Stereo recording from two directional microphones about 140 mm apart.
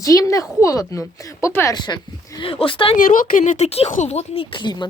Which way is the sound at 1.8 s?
30° left (ahead or behind).